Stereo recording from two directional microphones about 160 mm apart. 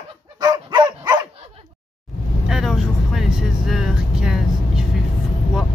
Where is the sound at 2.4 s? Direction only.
5° right (ahead or behind).